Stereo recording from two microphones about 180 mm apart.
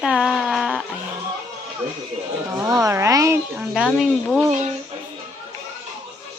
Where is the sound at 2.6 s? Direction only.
20° right (ahead or behind).